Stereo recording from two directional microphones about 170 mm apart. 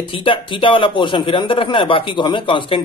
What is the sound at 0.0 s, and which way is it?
A man's voice, 30° left (ahead or behind).